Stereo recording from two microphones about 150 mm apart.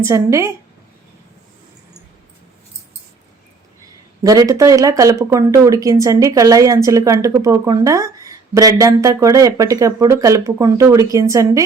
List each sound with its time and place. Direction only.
0.0 s speech: 20° right (ahead or behind)
4.2 s speech: 25° right (ahead or behind)